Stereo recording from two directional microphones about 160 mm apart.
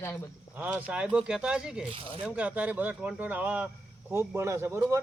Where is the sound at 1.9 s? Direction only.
35° right (ahead or behind).